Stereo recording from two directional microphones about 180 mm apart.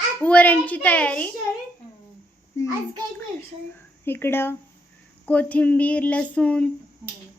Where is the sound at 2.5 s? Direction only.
15° left (ahead or behind).